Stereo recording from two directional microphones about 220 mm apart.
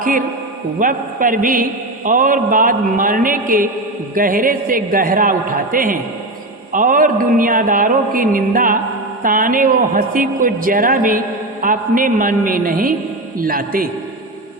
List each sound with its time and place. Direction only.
0.0 s mantra: 40° right (ahead or behind)